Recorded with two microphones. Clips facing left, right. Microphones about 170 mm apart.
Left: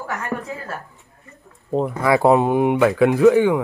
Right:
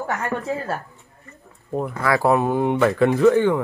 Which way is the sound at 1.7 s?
20° left (ahead or behind).